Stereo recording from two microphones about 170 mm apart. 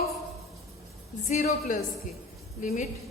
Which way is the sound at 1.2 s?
45° left (ahead or behind).